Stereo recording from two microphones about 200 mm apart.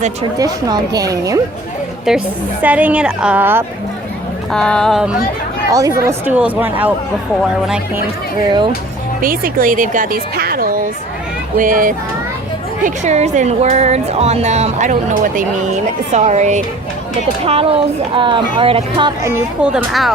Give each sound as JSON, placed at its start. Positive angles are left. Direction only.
{"t": 0.3, "sound": "a woman's voice", "side_deg": -20}
{"t": 2.0, "sound": "a woman's voice", "side_deg": -5}
{"t": 4.5, "sound": "speech", "side_deg": 5}
{"t": 5.7, "sound": "a woman's voice", "side_deg": -15}
{"t": 9.2, "sound": "a woman's voice", "side_deg": -45}
{"t": 19.3, "sound": "speech", "side_deg": -5}